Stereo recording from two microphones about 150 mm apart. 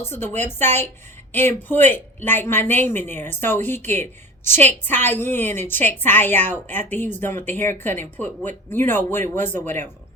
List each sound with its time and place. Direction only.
0.0 s a woman's voice: 15° left (ahead or behind)